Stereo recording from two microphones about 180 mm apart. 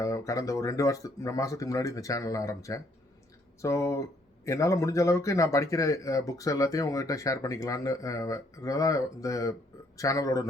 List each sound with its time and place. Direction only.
0.0 s a man's voice: 20° left (ahead or behind)